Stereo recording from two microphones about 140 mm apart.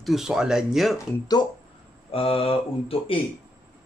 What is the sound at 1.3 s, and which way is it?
Speech, 30° left (ahead or behind).